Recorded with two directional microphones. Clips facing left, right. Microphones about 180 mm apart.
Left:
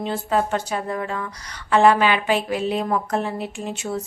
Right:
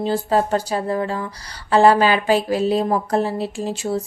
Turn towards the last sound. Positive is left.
turn(degrees=-35)  # may be behind; listen again after turning